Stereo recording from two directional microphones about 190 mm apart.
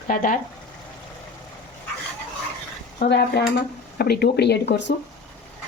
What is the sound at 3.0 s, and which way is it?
Speech, 60° left (ahead or behind).